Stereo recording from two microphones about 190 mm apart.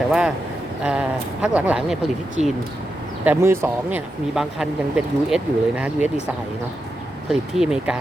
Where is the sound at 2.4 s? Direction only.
35° right (ahead or behind).